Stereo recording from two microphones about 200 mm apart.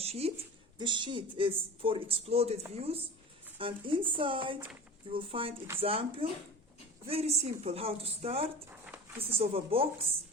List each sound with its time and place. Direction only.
0.0 s speech: 30° right (ahead or behind)
8.7 s a sound: 10° right (ahead or behind)
9.4 s speech: 30° right (ahead or behind)